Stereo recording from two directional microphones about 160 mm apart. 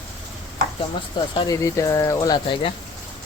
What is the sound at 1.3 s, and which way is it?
Speech, 20° left (ahead or behind).